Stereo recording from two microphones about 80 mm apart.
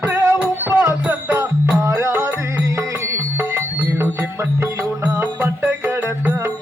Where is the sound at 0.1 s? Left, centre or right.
Right.